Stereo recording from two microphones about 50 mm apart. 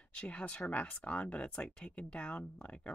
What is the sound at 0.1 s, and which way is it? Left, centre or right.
Speech, left.